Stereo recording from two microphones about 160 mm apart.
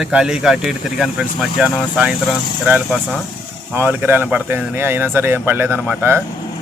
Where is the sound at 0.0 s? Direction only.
5° right (ahead or behind).